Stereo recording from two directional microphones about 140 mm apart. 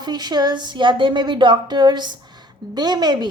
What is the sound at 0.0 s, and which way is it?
A woman's voice, 30° right (ahead or behind).